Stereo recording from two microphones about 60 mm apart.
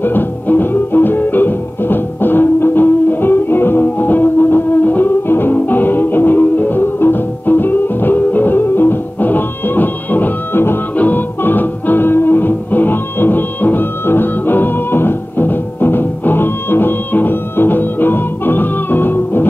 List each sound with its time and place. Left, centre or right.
0.0 s music: left